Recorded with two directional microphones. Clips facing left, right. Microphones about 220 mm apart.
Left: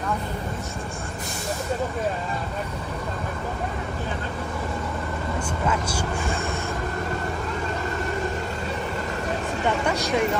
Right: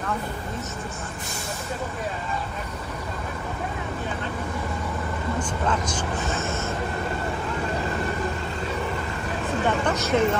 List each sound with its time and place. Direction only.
5.7 s speech: 10° left (ahead or behind)
9.8 s vehicle: 15° left (ahead or behind)